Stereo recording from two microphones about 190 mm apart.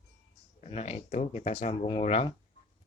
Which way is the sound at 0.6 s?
35° left (ahead or behind).